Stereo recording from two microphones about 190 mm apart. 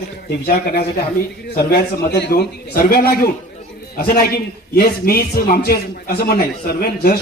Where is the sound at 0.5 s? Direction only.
55° left (ahead or behind).